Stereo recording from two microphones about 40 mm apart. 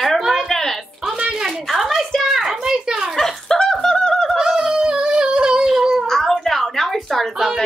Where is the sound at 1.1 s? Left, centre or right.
Centre.